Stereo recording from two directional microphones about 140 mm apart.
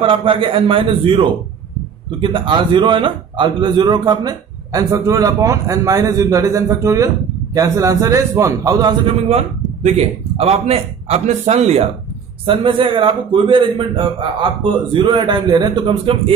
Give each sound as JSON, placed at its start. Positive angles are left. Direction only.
{"t": 0.1, "sound": "a man's voice", "side_deg": -40}
{"t": 9.8, "sound": "a man's voice", "side_deg": -45}
{"t": 12.4, "sound": "a man's voice", "side_deg": -35}